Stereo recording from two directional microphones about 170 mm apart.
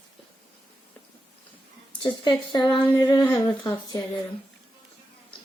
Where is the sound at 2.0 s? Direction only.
25° left (ahead or behind); by 3.7 s 10° left (ahead or behind).